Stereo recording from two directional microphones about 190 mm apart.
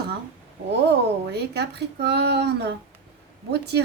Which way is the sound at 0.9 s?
60° right (ahead or behind).